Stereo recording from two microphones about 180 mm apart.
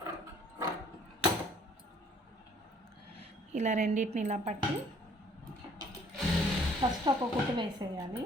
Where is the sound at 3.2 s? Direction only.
40° right (ahead or behind).